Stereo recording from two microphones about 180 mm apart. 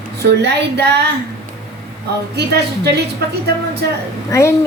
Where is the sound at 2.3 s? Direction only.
65° right (ahead or behind).